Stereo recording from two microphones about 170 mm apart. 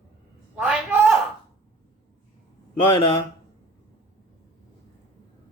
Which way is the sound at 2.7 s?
30° left (ahead or behind).